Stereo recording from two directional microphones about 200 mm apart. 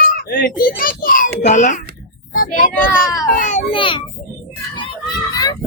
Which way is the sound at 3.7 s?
25° left (ahead or behind).